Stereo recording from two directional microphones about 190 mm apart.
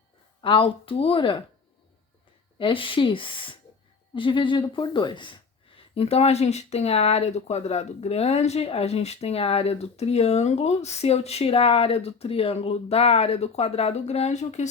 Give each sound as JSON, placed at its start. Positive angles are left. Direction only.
{"t": 0.4, "sound": "speech", "side_deg": 30}
{"t": 2.6, "sound": "speech", "side_deg": 25}